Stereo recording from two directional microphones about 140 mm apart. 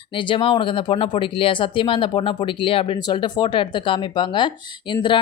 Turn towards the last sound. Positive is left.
turn(degrees=35)  # may be behind; listen again after turning